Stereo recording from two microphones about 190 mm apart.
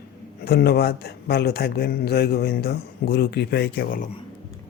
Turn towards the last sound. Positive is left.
turn(degrees=50)  # may be behind; listen again after turning